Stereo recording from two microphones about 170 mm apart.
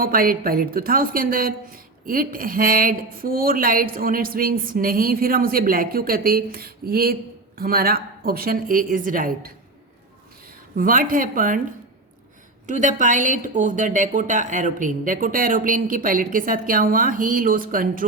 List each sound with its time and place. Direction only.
0.0 s a woman's voice: 55° right (ahead or behind)
10.8 s a woman's voice: 55° right (ahead or behind)
12.6 s a woman's voice: 45° right (ahead or behind)